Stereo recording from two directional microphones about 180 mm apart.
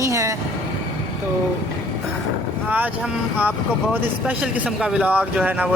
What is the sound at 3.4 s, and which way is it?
Speech, 10° right (ahead or behind).